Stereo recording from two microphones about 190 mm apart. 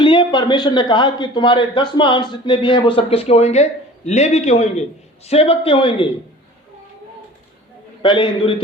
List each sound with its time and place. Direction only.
0.0 s a man's voice: 25° left (ahead or behind)
8.0 s a man's voice: 25° left (ahead or behind)